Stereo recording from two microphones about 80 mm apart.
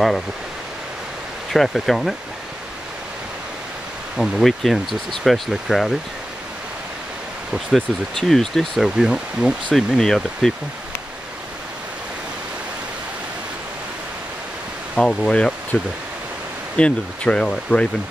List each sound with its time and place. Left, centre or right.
1.5 s speech: centre
4.2 s speech: centre
8.2 s speech: centre
9.8 s speech: centre
15.0 s speech: centre
15.7 s speech: left